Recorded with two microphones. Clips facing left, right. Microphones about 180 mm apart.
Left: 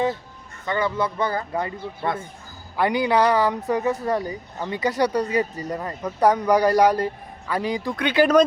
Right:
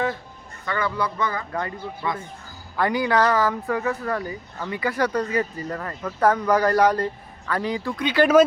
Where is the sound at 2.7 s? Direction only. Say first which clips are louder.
Left 1 dB; 15° left (ahead or behind).